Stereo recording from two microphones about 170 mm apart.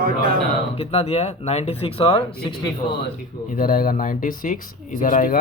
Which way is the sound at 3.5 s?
55° left (ahead or behind).